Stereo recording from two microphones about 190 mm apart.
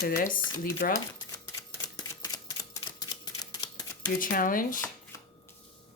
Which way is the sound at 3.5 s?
20° left (ahead or behind).